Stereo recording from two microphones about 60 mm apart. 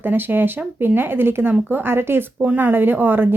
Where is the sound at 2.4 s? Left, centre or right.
Right.